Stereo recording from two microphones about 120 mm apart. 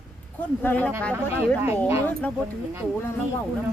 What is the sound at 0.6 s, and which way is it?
Speech, 15° left (ahead or behind).